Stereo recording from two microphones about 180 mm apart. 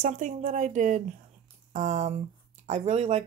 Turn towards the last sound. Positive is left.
turn(degrees=-35)  # may be behind; listen again after turning